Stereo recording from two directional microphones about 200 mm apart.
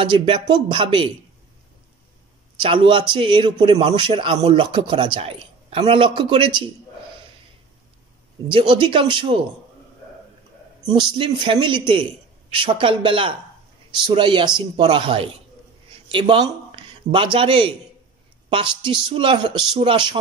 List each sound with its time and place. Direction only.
0.0 s a man's voice: 25° right (ahead or behind)
2.6 s a man's voice: 25° right (ahead or behind)
8.5 s a man's voice: 25° right (ahead or behind)
10.9 s a man's voice: 25° right (ahead or behind)